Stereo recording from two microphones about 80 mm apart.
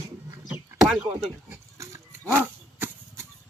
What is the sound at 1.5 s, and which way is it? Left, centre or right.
Pig, right.